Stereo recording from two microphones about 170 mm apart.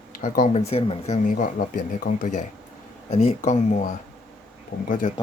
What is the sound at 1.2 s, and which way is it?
Speech, 50° left (ahead or behind).